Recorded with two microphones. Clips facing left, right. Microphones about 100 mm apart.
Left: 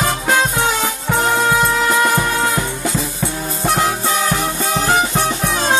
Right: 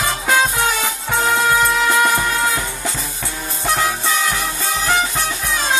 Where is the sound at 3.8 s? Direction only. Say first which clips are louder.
Left 1 dB; 30° left (ahead or behind).